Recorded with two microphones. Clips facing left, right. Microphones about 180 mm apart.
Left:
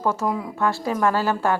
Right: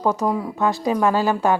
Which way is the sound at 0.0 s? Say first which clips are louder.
Right 3 dB; 15° right (ahead or behind).